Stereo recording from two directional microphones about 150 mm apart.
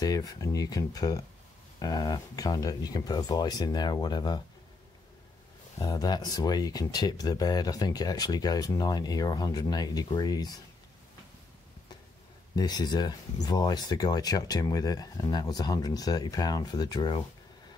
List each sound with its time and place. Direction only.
0.0 s speech: 25° left (ahead or behind)
5.8 s speech: 25° left (ahead or behind)
12.5 s speech: 25° left (ahead or behind)